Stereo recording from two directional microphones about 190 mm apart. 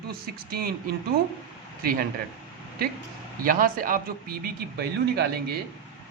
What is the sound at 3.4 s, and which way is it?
Speech, 50° right (ahead or behind).